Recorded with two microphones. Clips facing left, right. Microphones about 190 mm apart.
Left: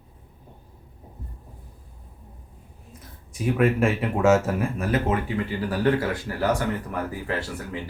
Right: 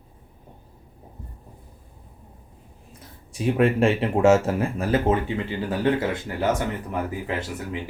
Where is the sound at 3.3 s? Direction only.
30° right (ahead or behind).